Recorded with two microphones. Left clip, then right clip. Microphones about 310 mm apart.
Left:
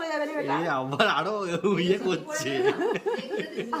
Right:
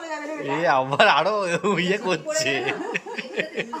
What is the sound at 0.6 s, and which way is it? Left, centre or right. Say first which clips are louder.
A man's voice: right 10 dB; centre.